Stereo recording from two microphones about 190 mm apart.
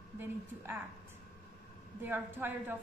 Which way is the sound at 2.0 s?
10° right (ahead or behind).